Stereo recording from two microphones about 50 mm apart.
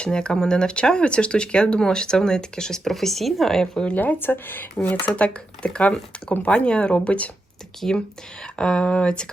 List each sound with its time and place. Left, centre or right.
0.0 s speech: centre
3.9 s speech: left
4.9 s speech: left